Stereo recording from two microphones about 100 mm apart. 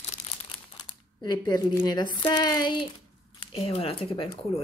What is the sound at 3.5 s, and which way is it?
Speech, 70° left (ahead or behind).